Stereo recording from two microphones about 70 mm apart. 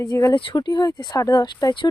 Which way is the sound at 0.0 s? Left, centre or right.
Left.